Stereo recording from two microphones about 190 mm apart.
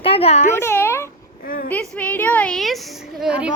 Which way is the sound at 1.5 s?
50° left (ahead or behind).